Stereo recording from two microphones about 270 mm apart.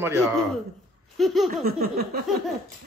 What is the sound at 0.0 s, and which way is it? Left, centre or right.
Speech, centre.